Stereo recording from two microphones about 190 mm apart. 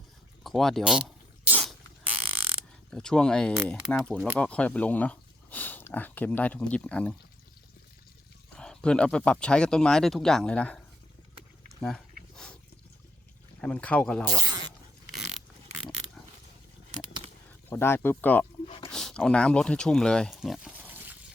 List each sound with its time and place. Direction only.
0.4 s a sound: centre (ahead or behind)
2.9 s speech: 5° left (ahead or behind)
8.5 s speech: 5° left (ahead or behind)
11.8 s dog: centre (ahead or behind)
13.6 s speech: 5° left (ahead or behind)
14.3 s speech: 20° right (ahead or behind)
17.7 s speech: 10° left (ahead or behind); by 21.2 s 10° right (ahead or behind)